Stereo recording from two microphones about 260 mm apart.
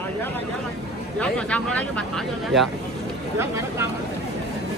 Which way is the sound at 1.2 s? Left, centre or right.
Centre.